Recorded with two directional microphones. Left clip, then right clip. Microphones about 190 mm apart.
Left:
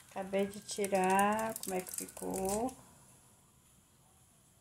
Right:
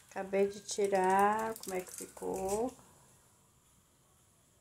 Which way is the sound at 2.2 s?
10° right (ahead or behind).